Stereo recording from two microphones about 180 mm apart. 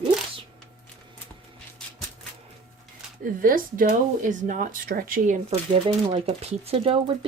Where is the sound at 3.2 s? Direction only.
50° right (ahead or behind).